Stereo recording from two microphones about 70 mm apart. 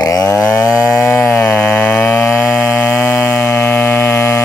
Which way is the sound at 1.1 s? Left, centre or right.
Left.